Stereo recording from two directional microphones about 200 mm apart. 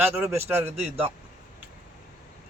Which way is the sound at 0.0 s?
10° right (ahead or behind).